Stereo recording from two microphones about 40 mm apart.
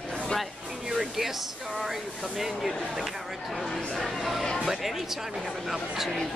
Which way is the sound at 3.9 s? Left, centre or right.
Centre.